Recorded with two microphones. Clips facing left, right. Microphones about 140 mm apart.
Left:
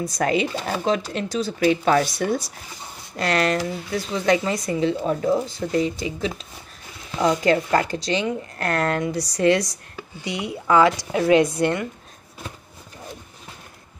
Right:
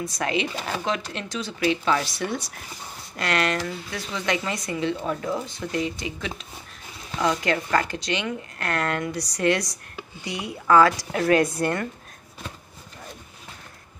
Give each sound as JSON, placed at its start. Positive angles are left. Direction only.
{"t": 0.0, "sound": "a woman's voice", "side_deg": 40}